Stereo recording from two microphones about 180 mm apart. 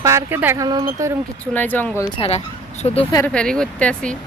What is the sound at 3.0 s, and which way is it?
Speech, 25° left (ahead or behind).